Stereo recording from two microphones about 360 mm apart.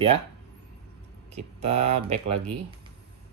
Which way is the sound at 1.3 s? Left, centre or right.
Centre.